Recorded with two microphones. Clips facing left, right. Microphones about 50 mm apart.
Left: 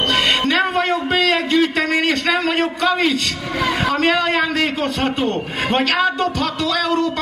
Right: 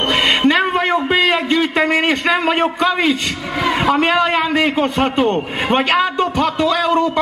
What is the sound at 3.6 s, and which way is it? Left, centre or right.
A man's voice, centre.